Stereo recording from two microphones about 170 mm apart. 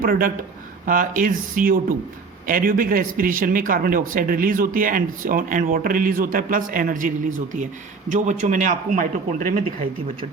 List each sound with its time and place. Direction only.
0.0 s a man's voice: 55° right (ahead or behind)